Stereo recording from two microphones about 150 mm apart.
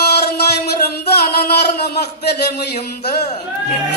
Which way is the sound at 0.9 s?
90° left.